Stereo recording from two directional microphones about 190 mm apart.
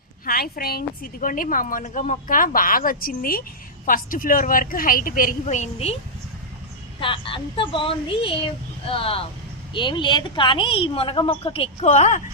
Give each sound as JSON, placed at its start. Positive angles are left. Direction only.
{"t": 0.3, "sound": "a woman's voice", "side_deg": 50}
{"t": 7.0, "sound": "speech", "side_deg": 25}